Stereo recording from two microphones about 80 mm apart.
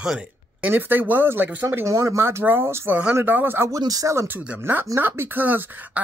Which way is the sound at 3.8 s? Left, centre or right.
Right.